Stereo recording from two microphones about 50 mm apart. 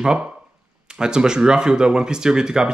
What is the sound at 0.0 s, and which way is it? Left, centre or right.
Speech, centre.